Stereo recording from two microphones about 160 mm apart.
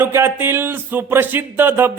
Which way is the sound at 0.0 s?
15° right (ahead or behind).